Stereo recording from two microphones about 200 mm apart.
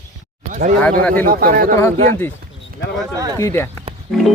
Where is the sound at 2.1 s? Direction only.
10° left (ahead or behind).